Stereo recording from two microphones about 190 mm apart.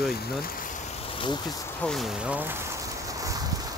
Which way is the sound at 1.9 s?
Centre (ahead or behind).